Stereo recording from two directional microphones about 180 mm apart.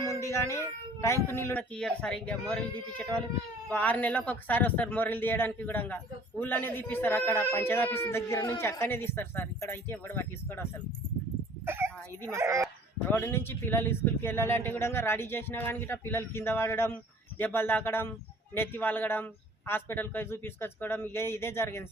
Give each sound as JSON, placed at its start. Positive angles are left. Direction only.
{"t": 0.1, "sound": "speech", "side_deg": 15}
{"t": 11.6, "sound": "dog", "side_deg": -15}
{"t": 12.3, "sound": "speech", "side_deg": -15}
{"t": 13.1, "sound": "speech", "side_deg": 10}